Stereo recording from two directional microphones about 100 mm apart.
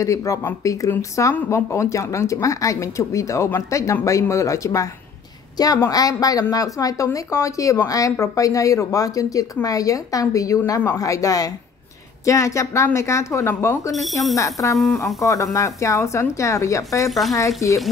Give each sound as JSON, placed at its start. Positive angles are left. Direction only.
{"t": 0.0, "sound": "a woman's voice", "side_deg": 35}
{"t": 5.9, "sound": "a woman's voice", "side_deg": 40}
{"t": 17.1, "sound": "speech", "side_deg": 0}
{"t": 17.6, "sound": "speech", "side_deg": 30}